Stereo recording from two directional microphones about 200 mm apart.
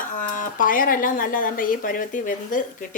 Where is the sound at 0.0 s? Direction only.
40° left (ahead or behind).